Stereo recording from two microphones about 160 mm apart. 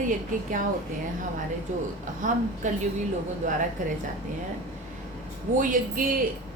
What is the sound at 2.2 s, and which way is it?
Speech, 55° right (ahead or behind).